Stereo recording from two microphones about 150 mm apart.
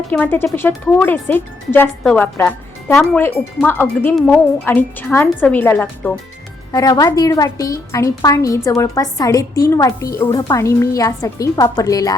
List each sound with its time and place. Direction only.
0.1 s speech: 10° left (ahead or behind)
6.7 s a woman's voice: 25° left (ahead or behind)